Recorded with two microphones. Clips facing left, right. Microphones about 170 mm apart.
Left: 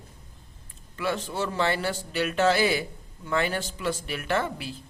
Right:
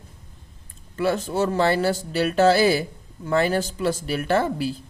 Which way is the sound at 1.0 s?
45° right (ahead or behind).